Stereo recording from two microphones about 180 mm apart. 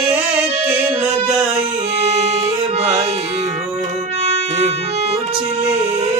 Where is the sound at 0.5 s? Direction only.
35° right (ahead or behind).